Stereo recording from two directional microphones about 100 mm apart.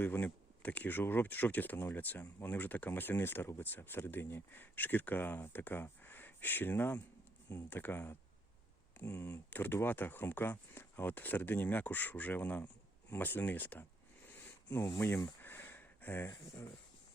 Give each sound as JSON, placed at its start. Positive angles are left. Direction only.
{"t": 0.0, "sound": "speech", "side_deg": 20}
{"t": 14.3, "sound": "a sound", "side_deg": 20}
{"t": 16.3, "sound": "speech", "side_deg": 30}